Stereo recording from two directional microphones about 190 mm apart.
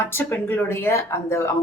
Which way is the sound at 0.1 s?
10° left (ahead or behind).